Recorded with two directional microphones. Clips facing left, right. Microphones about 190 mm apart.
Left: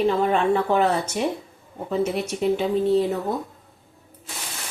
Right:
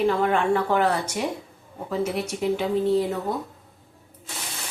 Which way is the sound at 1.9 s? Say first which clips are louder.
Left 2 dB; 25° left (ahead or behind).